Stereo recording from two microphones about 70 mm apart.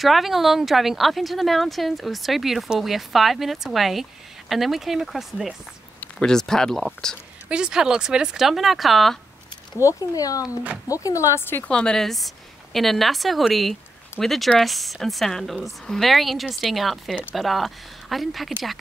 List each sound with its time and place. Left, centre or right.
0.0 s speech: centre
7.4 s speech: centre
9.8 s speech: left
11.3 s a woman's voice: left
11.6 s speech: centre